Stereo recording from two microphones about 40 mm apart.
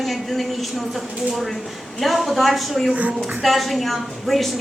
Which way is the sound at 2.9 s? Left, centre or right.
Right.